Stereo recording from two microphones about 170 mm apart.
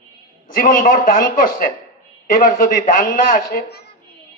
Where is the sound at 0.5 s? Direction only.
55° left (ahead or behind).